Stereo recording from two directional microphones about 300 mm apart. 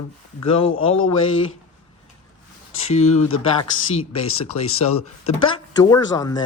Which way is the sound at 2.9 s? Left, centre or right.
Left.